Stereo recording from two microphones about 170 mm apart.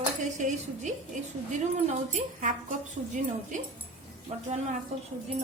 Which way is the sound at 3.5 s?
45° right (ahead or behind).